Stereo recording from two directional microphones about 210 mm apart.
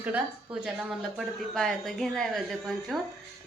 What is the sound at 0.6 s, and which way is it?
Speech, centre (ahead or behind).